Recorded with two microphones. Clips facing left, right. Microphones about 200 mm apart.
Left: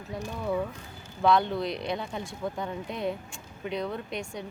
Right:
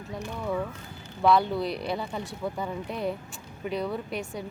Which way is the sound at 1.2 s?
5° right (ahead or behind).